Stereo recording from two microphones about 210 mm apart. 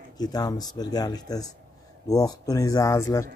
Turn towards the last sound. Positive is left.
turn(degrees=15)  # may be behind; listen again after turning